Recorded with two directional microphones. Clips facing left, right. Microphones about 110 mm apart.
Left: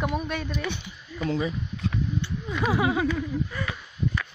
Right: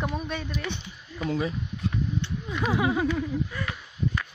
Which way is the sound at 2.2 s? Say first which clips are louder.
Left 2 dB; 5° left (ahead or behind).